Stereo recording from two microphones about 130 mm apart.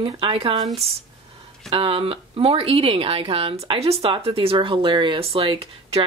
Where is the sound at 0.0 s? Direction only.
45° right (ahead or behind).